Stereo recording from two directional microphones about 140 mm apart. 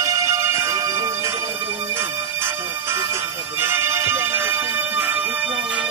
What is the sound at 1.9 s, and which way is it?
Music, 20° right (ahead or behind).